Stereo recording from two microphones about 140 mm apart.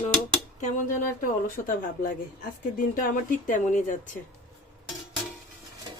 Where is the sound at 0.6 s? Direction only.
70° left (ahead or behind).